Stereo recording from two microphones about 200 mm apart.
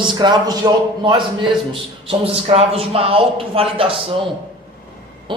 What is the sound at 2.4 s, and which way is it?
A man's voice, 30° right (ahead or behind).